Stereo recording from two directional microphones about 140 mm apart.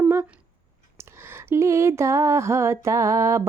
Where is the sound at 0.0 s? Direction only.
15° right (ahead or behind).